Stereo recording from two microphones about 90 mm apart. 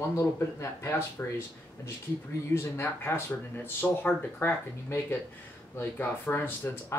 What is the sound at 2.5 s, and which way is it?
Speech, 30° left (ahead or behind).